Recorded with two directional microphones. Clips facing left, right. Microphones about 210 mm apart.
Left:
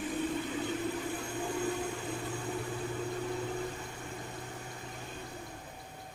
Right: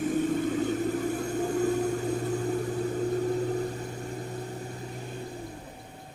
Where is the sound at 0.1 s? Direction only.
45° right (ahead or behind).